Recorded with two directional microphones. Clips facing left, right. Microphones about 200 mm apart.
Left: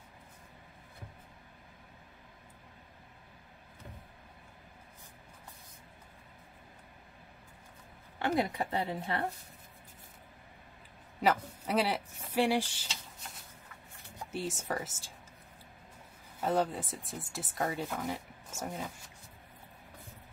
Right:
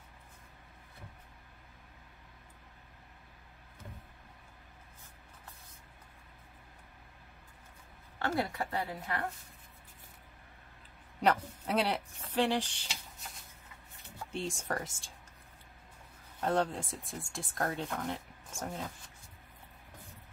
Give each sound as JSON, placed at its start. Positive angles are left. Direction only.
{"t": 8.2, "sound": "a woman's voice", "side_deg": 15}
{"t": 11.1, "sound": "speech", "side_deg": 5}
{"t": 14.3, "sound": "speech", "side_deg": 5}
{"t": 16.3, "sound": "speech", "side_deg": 5}